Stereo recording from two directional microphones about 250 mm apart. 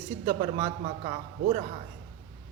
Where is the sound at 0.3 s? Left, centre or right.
Right.